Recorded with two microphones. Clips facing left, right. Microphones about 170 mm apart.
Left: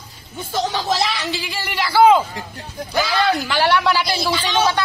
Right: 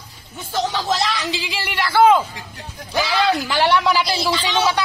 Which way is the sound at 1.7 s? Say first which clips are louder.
Left 1 dB; 5° left (ahead or behind).